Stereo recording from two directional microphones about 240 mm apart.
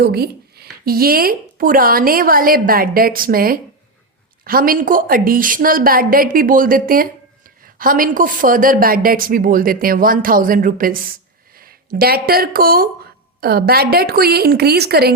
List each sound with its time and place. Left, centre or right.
0.0 s a woman's voice: right